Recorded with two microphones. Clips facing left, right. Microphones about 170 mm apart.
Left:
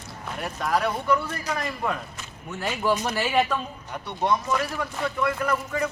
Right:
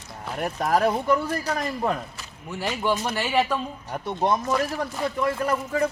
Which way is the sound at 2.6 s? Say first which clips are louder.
Even; centre (ahead or behind).